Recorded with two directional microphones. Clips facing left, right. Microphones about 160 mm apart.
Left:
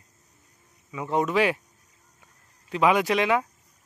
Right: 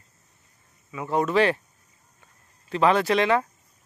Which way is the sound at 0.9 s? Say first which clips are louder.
Right 1 dB; 20° left (ahead or behind).